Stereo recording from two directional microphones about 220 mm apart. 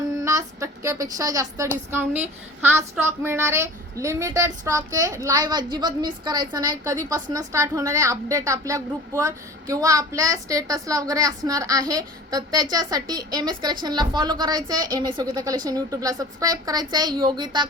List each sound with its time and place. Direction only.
0.2 s a woman's voice: 15° right (ahead or behind)